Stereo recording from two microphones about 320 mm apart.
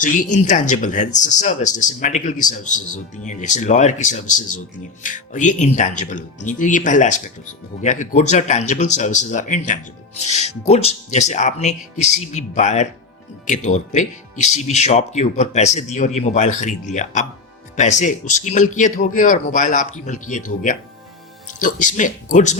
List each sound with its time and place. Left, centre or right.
0.0 s speech: left